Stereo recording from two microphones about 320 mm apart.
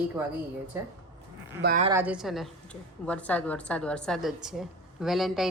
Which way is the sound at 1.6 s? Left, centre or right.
Right.